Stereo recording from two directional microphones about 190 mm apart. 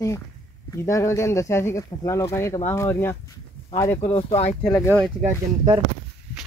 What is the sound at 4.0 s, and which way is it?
Speech, 30° left (ahead or behind).